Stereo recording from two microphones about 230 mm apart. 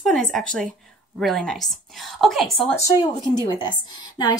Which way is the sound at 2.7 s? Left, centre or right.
Centre.